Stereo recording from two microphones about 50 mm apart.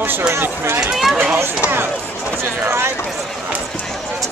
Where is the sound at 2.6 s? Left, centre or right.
Right.